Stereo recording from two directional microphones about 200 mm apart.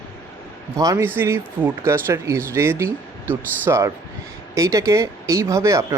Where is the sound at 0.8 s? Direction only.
15° right (ahead or behind).